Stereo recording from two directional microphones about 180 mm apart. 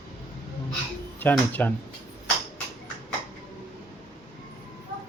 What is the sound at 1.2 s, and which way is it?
Speech, 10° left (ahead or behind).